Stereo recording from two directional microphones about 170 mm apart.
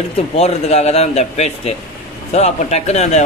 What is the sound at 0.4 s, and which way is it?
Speech, 40° left (ahead or behind).